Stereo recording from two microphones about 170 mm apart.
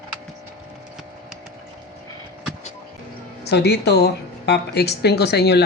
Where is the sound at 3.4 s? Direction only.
75° left (ahead or behind).